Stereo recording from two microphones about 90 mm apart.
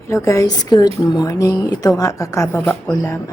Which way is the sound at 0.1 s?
35° left (ahead or behind).